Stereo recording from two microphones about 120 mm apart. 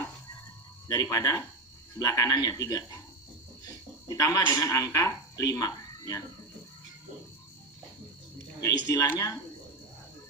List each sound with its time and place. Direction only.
0.9 s speech: 30° left (ahead or behind)
4.1 s speech: 30° left (ahead or behind)
8.6 s speech: 25° left (ahead or behind)